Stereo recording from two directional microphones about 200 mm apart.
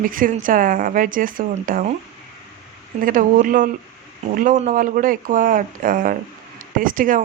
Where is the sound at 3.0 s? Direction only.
45° right (ahead or behind).